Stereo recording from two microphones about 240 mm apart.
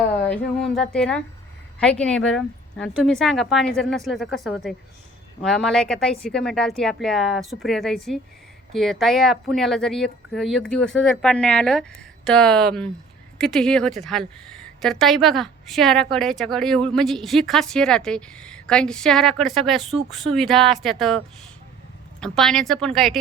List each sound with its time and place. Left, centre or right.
0.3 s a woman's voice: centre
22.2 s a woman's voice: centre